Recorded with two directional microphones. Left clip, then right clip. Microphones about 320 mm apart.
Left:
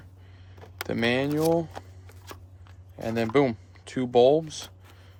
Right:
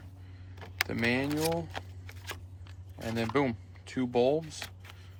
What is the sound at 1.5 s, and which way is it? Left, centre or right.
Speech, centre.